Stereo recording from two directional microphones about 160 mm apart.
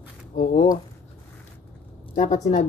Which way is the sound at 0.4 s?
50° left (ahead or behind).